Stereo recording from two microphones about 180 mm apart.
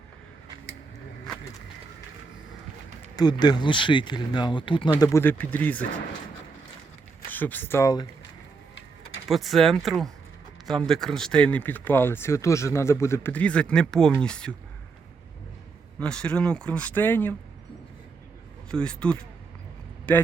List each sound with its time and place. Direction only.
3.2 s speech: 25° left (ahead or behind)
4.9 s speech: 15° left (ahead or behind)
7.3 s speech: 10° left (ahead or behind)
9.3 s speech: centre (ahead or behind)
16.0 s speech: 5° left (ahead or behind)
18.7 s speech: 5° left (ahead or behind)